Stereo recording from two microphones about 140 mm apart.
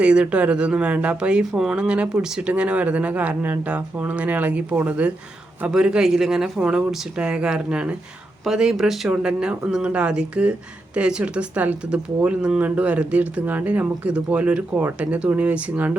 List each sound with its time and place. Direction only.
0.0 s speech: 10° right (ahead or behind)